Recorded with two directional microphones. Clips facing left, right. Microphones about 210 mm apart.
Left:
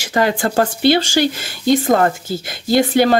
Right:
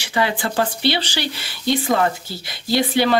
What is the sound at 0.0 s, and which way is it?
Speech, 45° left (ahead or behind).